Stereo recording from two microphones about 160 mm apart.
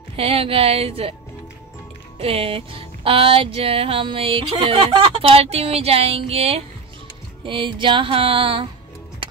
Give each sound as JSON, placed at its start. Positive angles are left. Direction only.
{"t": 0.1, "sound": "music", "side_deg": -35}
{"t": 2.1, "sound": "music", "side_deg": -35}